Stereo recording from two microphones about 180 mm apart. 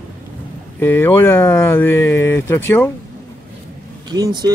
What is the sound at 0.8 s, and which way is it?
Speech, 10° left (ahead or behind).